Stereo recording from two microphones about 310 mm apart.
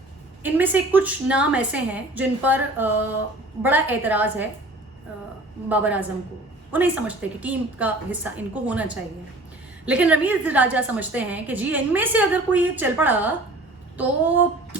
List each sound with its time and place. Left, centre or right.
0.4 s a woman's voice: centre
5.6 s a woman's voice: centre
13.9 s a sound: centre